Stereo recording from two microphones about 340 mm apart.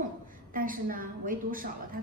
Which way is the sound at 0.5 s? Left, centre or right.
Right.